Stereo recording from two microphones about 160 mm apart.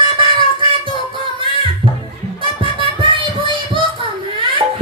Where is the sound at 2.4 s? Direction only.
30° right (ahead or behind).